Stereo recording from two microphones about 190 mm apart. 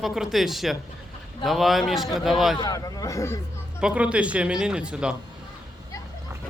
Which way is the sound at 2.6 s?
20° left (ahead or behind).